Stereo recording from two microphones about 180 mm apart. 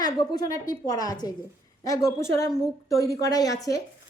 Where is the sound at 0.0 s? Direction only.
20° left (ahead or behind).